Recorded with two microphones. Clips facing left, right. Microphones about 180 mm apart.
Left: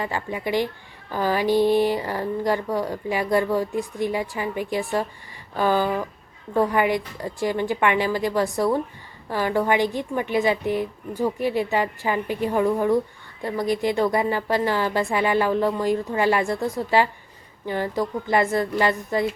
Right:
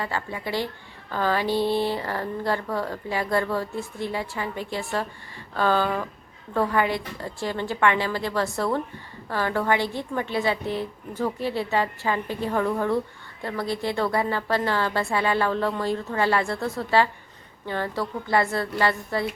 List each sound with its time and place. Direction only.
0.0 s speech: 15° left (ahead or behind)